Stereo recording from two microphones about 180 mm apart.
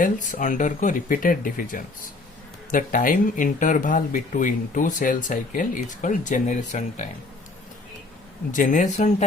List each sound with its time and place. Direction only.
0.0 s speech: 45° left (ahead or behind)
8.5 s speech: 45° left (ahead or behind)